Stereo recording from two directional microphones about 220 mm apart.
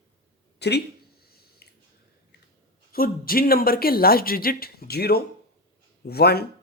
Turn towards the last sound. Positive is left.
turn(degrees=45)  # may be behind; listen again after turning